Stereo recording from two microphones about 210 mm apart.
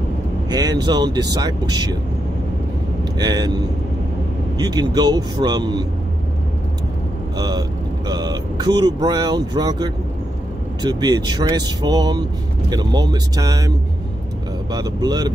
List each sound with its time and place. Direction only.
0.5 s speech: 20° right (ahead or behind)
3.2 s speech: 20° right (ahead or behind)
7.3 s speech: 20° right (ahead or behind)